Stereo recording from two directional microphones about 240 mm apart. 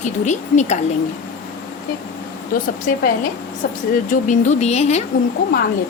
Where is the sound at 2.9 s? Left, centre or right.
Left.